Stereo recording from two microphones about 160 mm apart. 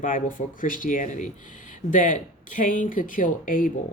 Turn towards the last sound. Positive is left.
turn(degrees=60)  # may be behind; listen again after turning